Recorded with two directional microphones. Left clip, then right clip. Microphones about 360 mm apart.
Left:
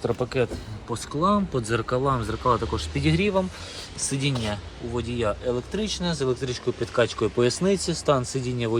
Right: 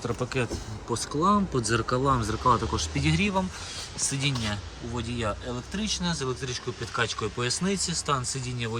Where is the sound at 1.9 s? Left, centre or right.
Left.